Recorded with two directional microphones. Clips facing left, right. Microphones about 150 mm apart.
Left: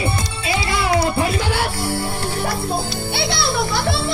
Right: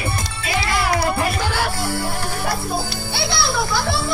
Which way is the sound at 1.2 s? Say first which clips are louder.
Left 2 dB; 30° left (ahead or behind).